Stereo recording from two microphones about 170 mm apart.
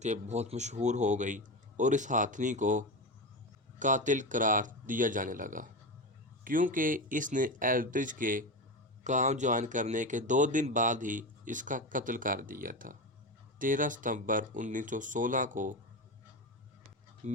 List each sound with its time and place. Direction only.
0.0 s speech: 40° right (ahead or behind)
17.2 s speech: 45° right (ahead or behind)